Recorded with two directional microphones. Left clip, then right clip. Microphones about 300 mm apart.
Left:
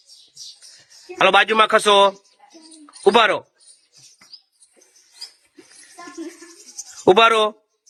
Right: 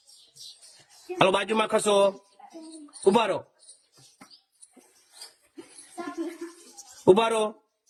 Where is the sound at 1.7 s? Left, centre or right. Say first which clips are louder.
Left 5 dB; centre.